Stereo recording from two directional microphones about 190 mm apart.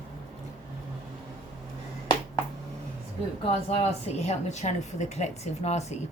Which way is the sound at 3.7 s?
35° left (ahead or behind).